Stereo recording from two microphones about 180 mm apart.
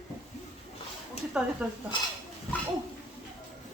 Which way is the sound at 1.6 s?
10° right (ahead or behind).